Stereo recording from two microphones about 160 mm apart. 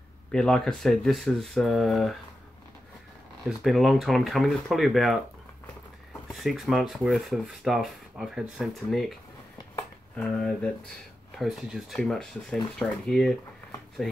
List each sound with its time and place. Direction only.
0.3 s speech: 5° left (ahead or behind)
3.4 s speech: centre (ahead or behind)
6.2 s speech: centre (ahead or behind)
10.1 s speech: 5° left (ahead or behind)